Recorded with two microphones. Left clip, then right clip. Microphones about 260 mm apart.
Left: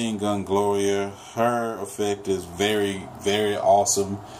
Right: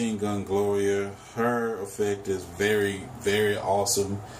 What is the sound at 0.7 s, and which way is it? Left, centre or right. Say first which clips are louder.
Speech: left 2 dB; centre.